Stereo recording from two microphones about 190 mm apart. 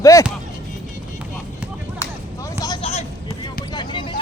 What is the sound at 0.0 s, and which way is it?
Speech, 15° left (ahead or behind).